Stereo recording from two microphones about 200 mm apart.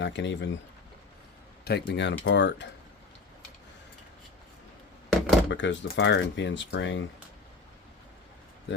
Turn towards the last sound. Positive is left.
turn(degrees=65)  # may be behind; listen again after turning